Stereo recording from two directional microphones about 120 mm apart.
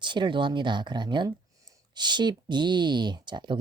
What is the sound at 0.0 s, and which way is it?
Speech, 40° right (ahead or behind).